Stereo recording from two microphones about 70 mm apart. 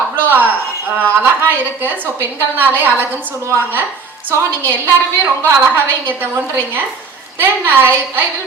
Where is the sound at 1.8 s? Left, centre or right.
Right.